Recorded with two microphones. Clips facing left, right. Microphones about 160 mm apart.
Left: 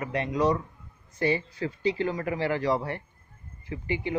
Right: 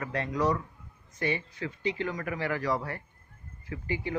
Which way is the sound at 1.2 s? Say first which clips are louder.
Left 5 dB; 30° left (ahead or behind).